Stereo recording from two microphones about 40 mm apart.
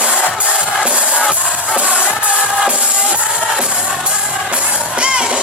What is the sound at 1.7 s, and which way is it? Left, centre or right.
Music, right.